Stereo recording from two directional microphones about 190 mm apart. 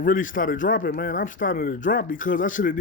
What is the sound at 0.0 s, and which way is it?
A man's voice, 45° left (ahead or behind).